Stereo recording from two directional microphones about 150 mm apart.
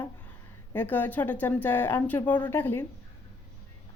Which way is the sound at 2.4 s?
15° left (ahead or behind).